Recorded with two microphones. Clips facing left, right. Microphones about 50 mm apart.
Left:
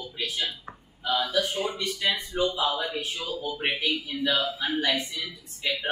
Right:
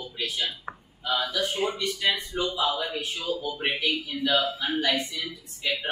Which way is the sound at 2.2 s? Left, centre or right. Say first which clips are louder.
Left 2 dB; left.